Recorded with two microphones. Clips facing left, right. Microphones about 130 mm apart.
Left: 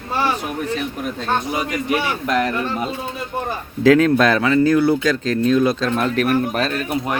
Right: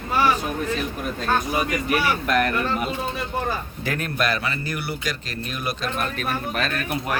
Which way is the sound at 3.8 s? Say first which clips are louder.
Left 17 dB; 90° left.